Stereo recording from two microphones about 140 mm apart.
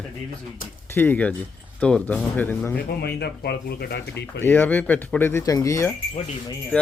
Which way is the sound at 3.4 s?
90° left.